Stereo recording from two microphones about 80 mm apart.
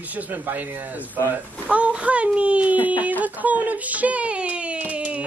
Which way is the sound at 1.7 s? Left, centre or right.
Centre.